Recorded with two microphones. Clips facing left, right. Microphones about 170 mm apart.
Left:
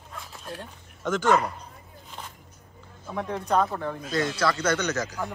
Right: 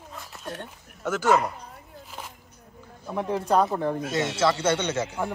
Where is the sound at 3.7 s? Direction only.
25° right (ahead or behind).